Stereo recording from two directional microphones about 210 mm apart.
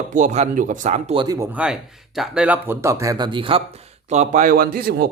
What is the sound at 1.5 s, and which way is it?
Speech, 5° right (ahead or behind).